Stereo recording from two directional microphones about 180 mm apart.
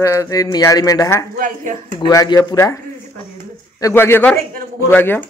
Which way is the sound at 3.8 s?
15° left (ahead or behind).